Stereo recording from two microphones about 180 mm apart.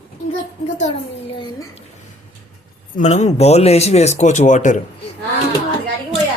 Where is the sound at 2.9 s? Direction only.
40° left (ahead or behind).